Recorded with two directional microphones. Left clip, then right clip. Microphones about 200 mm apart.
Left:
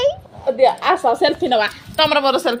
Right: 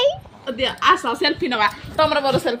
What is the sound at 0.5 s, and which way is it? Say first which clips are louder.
Speech: left 2 dB; 45° right (ahead or behind).